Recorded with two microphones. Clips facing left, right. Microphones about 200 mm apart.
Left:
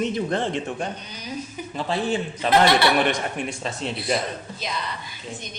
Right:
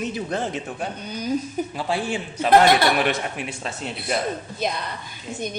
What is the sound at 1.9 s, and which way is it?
Speech, 10° right (ahead or behind).